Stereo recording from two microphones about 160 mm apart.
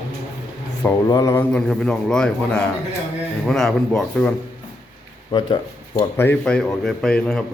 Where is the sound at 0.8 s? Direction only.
20° left (ahead or behind).